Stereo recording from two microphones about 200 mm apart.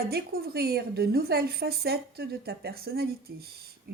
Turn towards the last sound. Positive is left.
turn(degrees=-50)  # may be behind; listen again after turning